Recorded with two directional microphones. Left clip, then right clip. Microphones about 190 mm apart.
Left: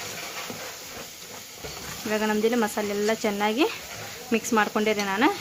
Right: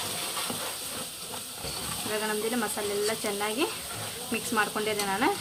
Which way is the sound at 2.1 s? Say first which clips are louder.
Left 7 dB; 65° left (ahead or behind).